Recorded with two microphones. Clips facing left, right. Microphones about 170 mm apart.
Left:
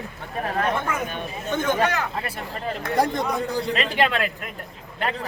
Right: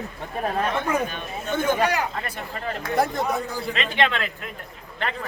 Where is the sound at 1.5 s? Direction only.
10° right (ahead or behind).